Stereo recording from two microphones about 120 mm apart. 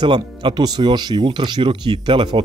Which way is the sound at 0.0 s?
40° right (ahead or behind).